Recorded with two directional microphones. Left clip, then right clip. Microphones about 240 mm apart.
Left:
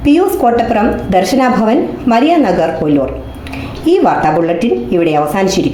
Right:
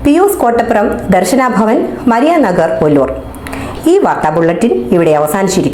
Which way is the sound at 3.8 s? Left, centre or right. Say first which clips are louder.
Right 1 dB; right.